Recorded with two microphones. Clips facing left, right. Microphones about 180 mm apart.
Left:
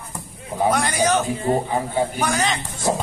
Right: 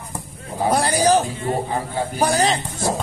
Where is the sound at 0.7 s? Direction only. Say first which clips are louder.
Right 6 dB; 35° right (ahead or behind).